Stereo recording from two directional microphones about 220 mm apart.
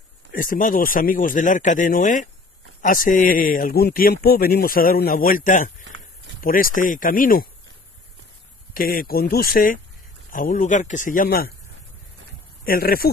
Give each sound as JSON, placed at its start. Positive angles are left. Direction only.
{"t": 0.3, "sound": "a man's voice", "side_deg": 40}
{"t": 8.7, "sound": "a man's voice", "side_deg": 40}
{"t": 12.6, "sound": "a man's voice", "side_deg": 40}